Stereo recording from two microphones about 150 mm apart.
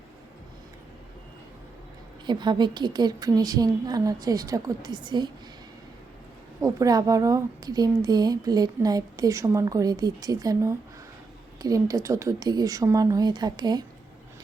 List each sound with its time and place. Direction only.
2.2 s a woman's voice: 30° right (ahead or behind)
6.6 s a woman's voice: 20° right (ahead or behind)